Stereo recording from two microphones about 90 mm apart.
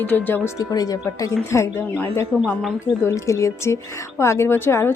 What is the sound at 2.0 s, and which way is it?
Speech, 20° left (ahead or behind).